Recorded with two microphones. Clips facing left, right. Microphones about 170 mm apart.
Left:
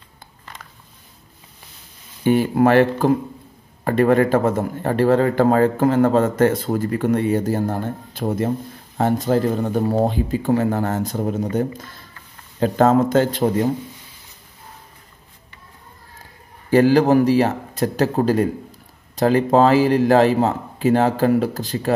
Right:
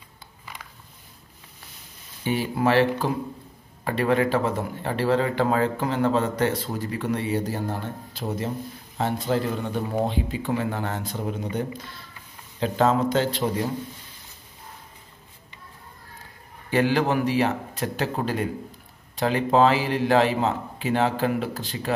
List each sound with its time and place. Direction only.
2.2 s speech: 50° left (ahead or behind)
16.7 s a man's voice: 40° left (ahead or behind)